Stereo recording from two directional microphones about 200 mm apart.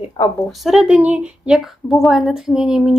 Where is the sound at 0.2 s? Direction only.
20° left (ahead or behind).